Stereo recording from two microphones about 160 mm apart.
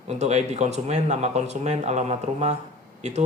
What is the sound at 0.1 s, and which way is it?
Speech, 45° right (ahead or behind).